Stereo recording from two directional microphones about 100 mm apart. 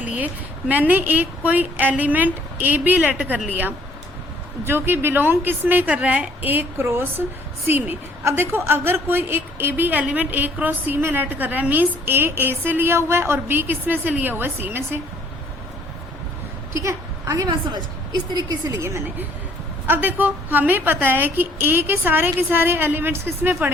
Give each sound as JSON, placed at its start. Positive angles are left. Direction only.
{"t": 0.7, "sound": "a woman's voice", "side_deg": -15}
{"t": 16.7, "sound": "a woman's voice", "side_deg": -30}
{"t": 18.8, "sound": "a woman's voice", "side_deg": -25}